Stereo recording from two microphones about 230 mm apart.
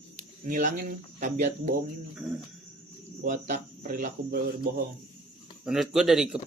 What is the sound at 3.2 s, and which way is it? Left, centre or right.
Speech, right.